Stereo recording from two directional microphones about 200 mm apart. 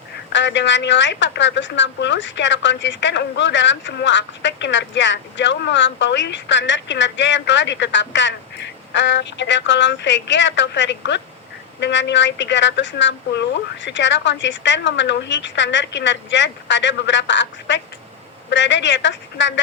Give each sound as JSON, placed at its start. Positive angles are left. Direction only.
{"t": 0.3, "sound": "a woman's voice", "side_deg": 65}